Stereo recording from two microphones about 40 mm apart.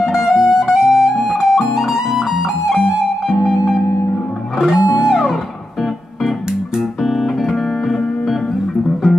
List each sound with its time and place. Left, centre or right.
0.0 s music: centre
7.0 s music: centre